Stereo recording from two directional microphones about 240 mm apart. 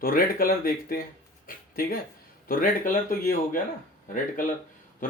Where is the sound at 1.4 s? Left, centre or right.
Left.